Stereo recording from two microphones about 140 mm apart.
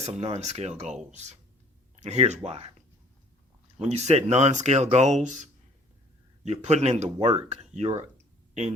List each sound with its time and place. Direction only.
0.0 s speech: 50° right (ahead or behind)
3.8 s speech: 50° right (ahead or behind)